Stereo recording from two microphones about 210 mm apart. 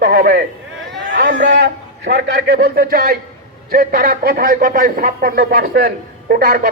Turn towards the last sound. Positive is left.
turn(degrees=-45)  # may be behind; listen again after turning